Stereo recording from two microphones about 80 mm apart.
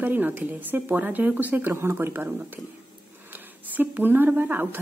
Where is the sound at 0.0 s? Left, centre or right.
Right.